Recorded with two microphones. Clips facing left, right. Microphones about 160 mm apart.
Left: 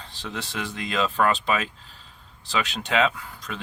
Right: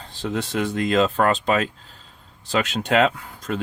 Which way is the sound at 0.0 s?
45° right (ahead or behind).